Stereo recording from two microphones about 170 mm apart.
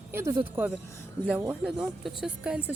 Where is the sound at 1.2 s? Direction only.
10° right (ahead or behind).